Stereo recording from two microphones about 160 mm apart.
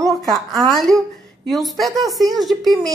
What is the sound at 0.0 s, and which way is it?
A woman's voice, centre (ahead or behind).